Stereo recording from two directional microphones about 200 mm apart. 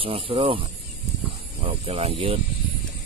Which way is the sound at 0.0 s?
25° right (ahead or behind).